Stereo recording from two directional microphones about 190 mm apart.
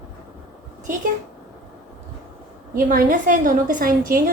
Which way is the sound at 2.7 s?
45° right (ahead or behind).